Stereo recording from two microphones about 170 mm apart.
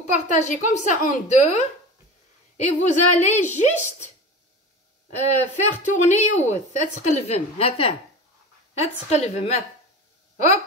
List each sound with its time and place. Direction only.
0.1 s a woman's voice: 45° left (ahead or behind)
5.3 s a woman's voice: 45° left (ahead or behind)
10.3 s a sound: 40° left (ahead or behind)